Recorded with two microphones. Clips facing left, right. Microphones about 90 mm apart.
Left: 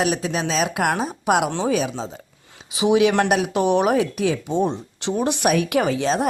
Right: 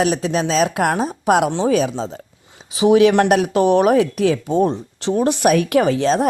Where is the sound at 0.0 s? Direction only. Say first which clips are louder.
Right 4 dB; 35° right (ahead or behind).